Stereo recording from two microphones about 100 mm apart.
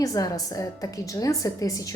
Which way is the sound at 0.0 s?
35° left (ahead or behind).